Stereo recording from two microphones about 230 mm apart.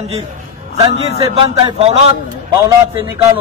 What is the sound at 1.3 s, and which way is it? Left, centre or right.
Speech, right.